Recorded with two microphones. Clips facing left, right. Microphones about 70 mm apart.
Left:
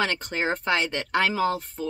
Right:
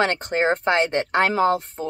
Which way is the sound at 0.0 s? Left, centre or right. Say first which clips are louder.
Right 6 dB; right.